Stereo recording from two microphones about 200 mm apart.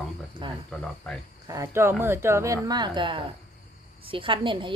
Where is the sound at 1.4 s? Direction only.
15° right (ahead or behind).